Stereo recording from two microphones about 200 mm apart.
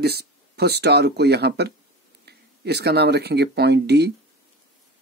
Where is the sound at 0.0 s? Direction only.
55° right (ahead or behind).